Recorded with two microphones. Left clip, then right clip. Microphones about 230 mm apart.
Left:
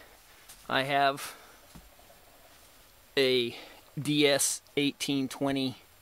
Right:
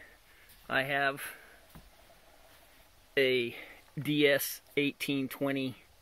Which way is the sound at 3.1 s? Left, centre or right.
Centre.